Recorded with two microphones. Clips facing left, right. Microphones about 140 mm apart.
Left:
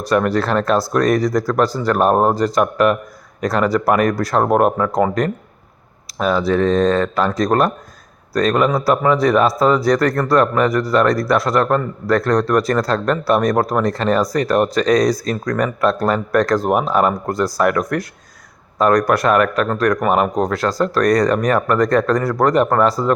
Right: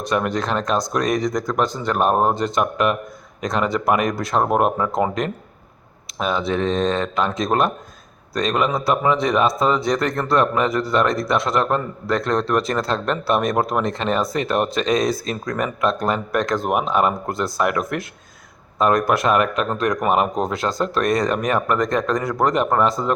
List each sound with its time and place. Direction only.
0.0 s speech: 20° right (ahead or behind)
2.0 s speech: 5° left (ahead or behind)
2.6 s speech: 20° right (ahead or behind)
19.0 s speech: centre (ahead or behind)
19.3 s speech: 20° right (ahead or behind)